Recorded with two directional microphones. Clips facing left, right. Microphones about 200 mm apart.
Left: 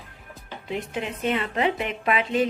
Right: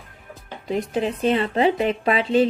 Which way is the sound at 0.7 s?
35° right (ahead or behind).